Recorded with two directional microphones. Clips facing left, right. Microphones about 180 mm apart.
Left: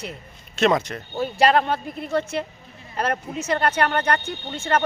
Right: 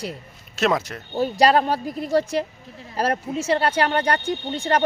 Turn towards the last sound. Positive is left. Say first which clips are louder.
# right 2 dB
turn(degrees=-35)  # may be behind; listen again after turning